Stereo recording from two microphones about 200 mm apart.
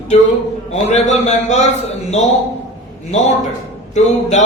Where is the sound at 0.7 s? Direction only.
35° left (ahead or behind).